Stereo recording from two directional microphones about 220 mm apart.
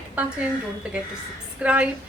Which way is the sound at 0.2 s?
5° right (ahead or behind).